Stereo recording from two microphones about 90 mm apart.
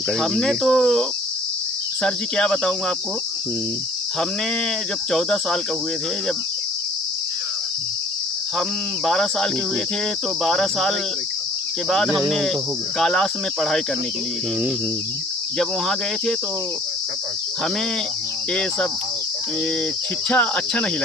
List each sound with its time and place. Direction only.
0.2 s cricket: 5° left (ahead or behind)
5.1 s cricket: 5° left (ahead or behind)
9.0 s cricket: 5° left (ahead or behind)
15.5 s cricket: centre (ahead or behind)
20.3 s cricket: 15° left (ahead or behind)